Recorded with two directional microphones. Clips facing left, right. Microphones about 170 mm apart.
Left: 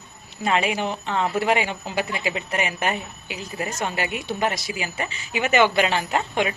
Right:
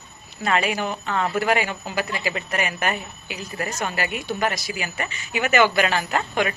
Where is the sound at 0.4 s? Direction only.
20° left (ahead or behind).